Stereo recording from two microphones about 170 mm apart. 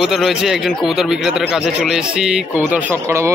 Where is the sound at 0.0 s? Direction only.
Centre (ahead or behind).